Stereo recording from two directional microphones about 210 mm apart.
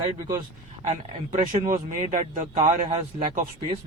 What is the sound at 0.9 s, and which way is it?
Speech, 35° right (ahead or behind).